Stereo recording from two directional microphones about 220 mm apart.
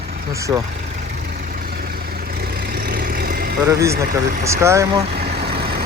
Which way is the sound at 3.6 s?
15° right (ahead or behind).